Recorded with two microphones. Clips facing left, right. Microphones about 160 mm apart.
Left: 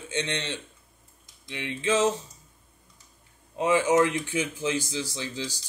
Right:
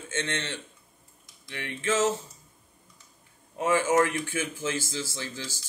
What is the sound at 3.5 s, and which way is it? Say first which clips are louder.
A man's voice: left 2 dB; 15° left (ahead or behind).